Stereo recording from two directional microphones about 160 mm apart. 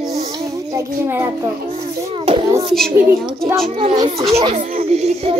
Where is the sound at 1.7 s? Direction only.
40° right (ahead or behind).